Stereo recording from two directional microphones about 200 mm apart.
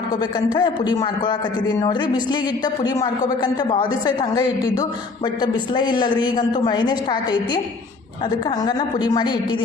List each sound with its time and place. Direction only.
0.2 s a woman's voice: 20° left (ahead or behind)